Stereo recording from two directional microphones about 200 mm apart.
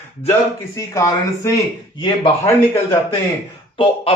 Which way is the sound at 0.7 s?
15° left (ahead or behind).